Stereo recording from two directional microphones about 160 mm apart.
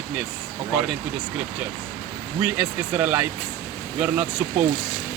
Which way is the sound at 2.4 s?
10° right (ahead or behind).